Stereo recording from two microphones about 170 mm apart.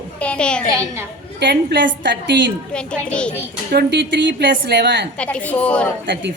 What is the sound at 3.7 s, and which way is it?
A woman's voice, 80° right.